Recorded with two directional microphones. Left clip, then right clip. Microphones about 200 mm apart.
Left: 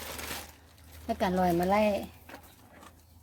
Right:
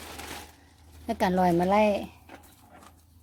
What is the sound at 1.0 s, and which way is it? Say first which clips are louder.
Speech: right 3 dB; 40° right (ahead or behind).